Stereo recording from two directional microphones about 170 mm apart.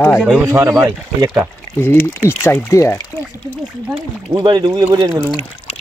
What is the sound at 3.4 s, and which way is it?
Speech, 10° right (ahead or behind).